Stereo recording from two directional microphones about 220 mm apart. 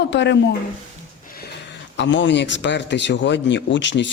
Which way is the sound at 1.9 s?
55° left (ahead or behind).